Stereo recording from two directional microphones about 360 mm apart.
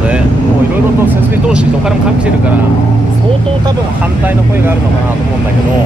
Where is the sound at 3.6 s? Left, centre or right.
Centre.